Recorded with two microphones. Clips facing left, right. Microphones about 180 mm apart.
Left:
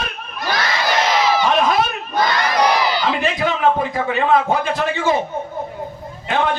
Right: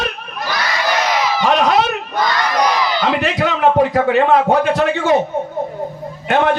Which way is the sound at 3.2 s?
70° right (ahead or behind).